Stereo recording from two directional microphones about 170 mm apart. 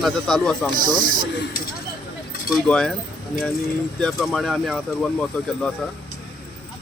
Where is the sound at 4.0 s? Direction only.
Centre (ahead or behind).